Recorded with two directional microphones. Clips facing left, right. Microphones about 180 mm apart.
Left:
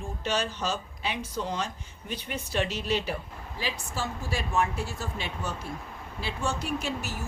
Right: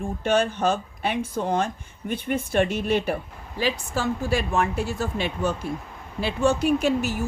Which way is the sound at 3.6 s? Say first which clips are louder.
Right 9 dB; 65° right (ahead or behind).